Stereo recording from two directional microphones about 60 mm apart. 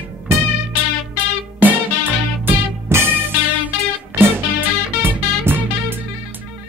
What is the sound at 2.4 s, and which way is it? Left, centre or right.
Music, right.